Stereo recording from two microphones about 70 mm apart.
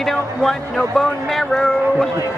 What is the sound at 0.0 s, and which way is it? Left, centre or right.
Speech, centre.